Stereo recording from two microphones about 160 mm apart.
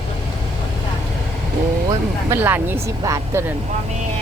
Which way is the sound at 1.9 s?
15° right (ahead or behind).